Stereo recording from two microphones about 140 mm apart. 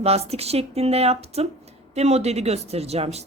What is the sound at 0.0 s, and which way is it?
Speech, 50° right (ahead or behind).